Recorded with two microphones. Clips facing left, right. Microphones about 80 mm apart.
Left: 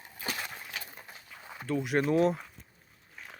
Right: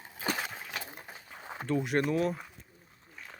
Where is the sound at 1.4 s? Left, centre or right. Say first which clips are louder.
Right 5 dB; right.